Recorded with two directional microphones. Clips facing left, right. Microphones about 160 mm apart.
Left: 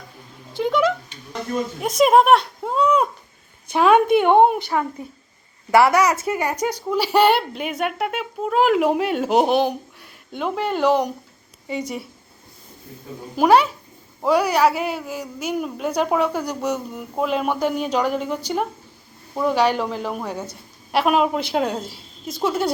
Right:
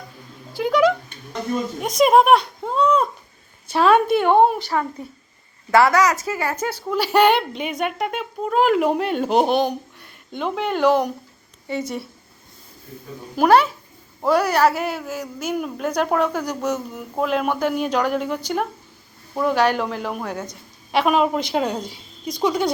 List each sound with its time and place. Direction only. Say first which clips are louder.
0.5 s a woman's voice: right 2 dB; centre (ahead or behind)
13.4 s a woman's voice: even; 10° left (ahead or behind)
20.2 s a woman's voice: even; 10° left (ahead or behind)